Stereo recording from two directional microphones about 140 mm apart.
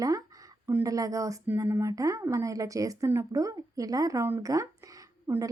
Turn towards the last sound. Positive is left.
turn(degrees=-20)  # may be behind; listen again after turning